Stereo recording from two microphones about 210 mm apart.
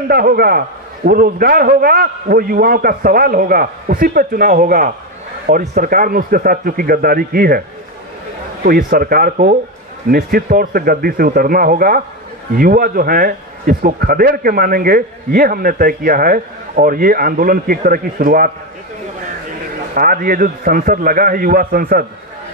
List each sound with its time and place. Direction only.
0.1 s a man's voice: 45° right (ahead or behind)
8.6 s a man's voice: 45° right (ahead or behind)
19.9 s a man's voice: 45° right (ahead or behind)